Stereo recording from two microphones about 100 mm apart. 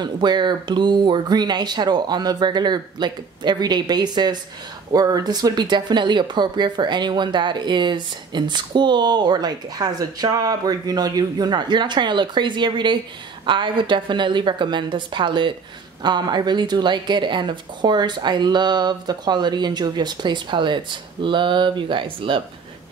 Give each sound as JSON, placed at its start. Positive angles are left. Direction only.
{"t": 0.0, "sound": "speech", "side_deg": -45}